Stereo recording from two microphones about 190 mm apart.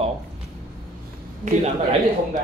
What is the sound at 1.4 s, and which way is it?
Speech, 35° right (ahead or behind).